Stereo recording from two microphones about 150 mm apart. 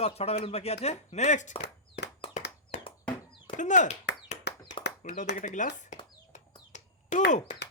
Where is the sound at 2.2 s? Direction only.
40° left (ahead or behind).